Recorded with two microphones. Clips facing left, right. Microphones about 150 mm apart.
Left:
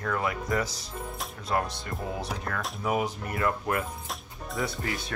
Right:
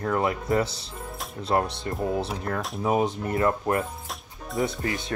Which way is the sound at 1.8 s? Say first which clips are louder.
Right 7 dB; 25° right (ahead or behind).